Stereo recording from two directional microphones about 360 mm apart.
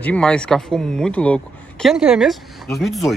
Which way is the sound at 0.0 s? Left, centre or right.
Centre.